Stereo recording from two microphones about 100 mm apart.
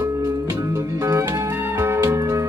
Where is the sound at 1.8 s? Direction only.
25° right (ahead or behind).